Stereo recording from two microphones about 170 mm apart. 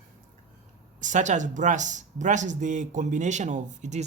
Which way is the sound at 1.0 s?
45° right (ahead or behind).